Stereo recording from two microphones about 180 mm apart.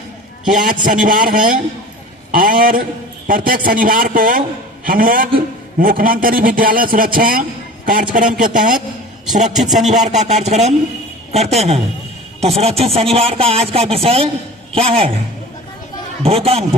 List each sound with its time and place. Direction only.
0.5 s a man's voice: 50° right (ahead or behind); by 15.1 s 30° right (ahead or behind)
16.2 s speech: 35° right (ahead or behind)